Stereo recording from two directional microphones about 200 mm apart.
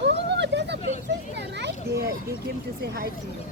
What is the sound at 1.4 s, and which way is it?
Children playing, 60° right (ahead or behind).